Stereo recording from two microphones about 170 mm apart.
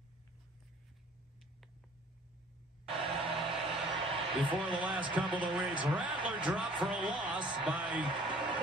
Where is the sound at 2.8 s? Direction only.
35° right (ahead or behind).